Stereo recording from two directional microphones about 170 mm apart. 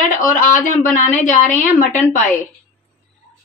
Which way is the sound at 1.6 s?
45° left (ahead or behind).